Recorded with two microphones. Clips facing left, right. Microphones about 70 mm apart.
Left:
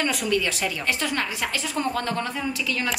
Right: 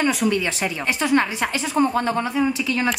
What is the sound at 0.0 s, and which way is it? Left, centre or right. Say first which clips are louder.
A woman's voice: right 4 dB; right.